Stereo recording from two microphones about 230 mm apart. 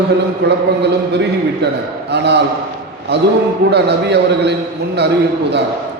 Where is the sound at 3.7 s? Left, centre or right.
Right.